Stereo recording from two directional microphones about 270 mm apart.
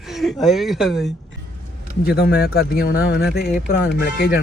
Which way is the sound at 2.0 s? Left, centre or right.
Left.